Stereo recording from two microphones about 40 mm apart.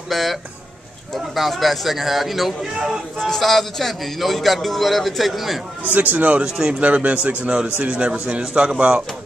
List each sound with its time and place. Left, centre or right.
0.1 s a man's voice: centre
2.6 s speech: centre
3.3 s a man's voice: centre
6.1 s a man's voice: right
6.4 s speech: centre
6.8 s a man's voice: right